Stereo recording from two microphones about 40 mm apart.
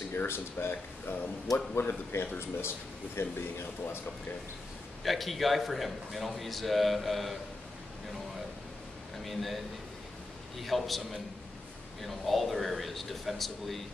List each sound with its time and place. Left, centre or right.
0.3 s speech: left
5.0 s a man's voice: centre
9.2 s a man's voice: centre
10.6 s a man's voice: centre
12.0 s a man's voice: centre